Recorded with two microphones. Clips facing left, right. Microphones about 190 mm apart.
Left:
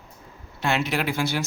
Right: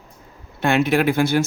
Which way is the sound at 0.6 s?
55° right (ahead or behind).